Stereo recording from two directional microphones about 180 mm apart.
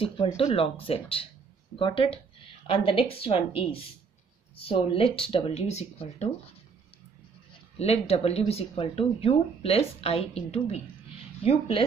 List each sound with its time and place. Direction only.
0.4 s speech: 30° left (ahead or behind)
7.8 s speech: 35° left (ahead or behind)